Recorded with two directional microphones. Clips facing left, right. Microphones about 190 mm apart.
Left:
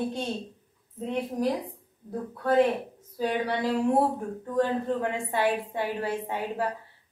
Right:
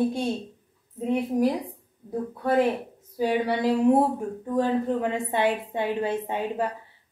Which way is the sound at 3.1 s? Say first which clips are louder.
Right 3 dB; 10° right (ahead or behind).